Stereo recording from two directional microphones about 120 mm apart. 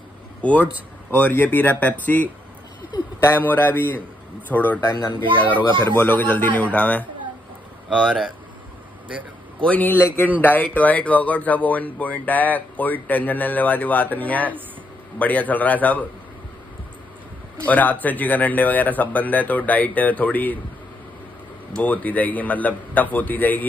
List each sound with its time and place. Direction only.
0.4 s a man's voice: 10° left (ahead or behind)
4.8 s speech: 35° left (ahead or behind)
5.2 s speech: 45° right (ahead or behind)
5.9 s a man's voice: 15° left (ahead or behind)
7.9 s speech: centre (ahead or behind)
9.7 s a man's voice: 15° left (ahead or behind)
17.6 s a man's voice: 15° left (ahead or behind)
21.7 s a man's voice: 15° left (ahead or behind)